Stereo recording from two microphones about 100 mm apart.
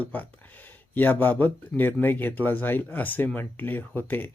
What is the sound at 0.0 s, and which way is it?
Speech, 15° left (ahead or behind).